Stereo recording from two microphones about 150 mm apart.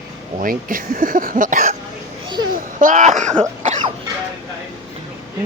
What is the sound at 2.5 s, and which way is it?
Throat clearing, 65° right (ahead or behind).